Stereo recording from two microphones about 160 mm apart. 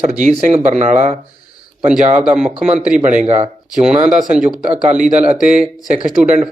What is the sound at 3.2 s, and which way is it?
Speech, 40° right (ahead or behind).